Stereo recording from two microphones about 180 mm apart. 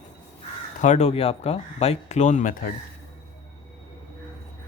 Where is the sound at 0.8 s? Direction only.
40° left (ahead or behind).